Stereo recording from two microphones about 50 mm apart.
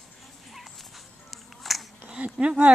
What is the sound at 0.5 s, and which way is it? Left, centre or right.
Dog, centre.